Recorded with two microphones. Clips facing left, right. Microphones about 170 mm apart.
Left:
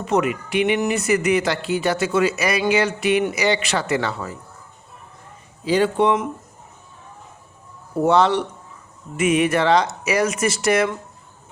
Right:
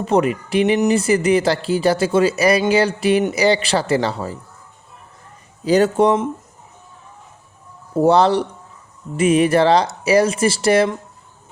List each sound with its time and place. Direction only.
0.0 s speech: 35° right (ahead or behind)
5.6 s speech: 40° right (ahead or behind)
7.9 s speech: 35° right (ahead or behind)